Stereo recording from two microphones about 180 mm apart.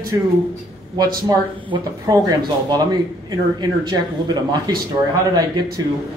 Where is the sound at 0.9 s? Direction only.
25° right (ahead or behind).